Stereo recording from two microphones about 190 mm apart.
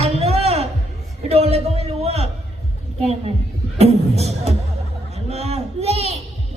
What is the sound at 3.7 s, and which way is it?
Speech, 35° right (ahead or behind).